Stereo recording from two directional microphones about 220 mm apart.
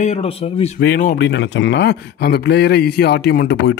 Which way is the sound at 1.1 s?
55° left (ahead or behind).